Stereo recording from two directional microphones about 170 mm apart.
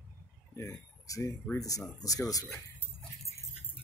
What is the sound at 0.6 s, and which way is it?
Speech, 20° left (ahead or behind).